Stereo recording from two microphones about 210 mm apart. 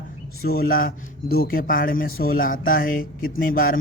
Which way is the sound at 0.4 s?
45° left (ahead or behind).